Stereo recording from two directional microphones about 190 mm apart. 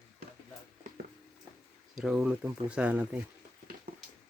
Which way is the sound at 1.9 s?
Centre (ahead or behind).